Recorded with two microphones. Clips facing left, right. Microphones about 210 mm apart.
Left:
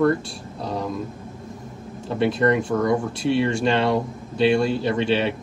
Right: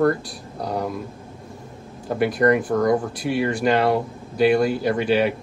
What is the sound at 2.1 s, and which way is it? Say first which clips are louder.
A man's voice: right 1 dB; 25° left (ahead or behind).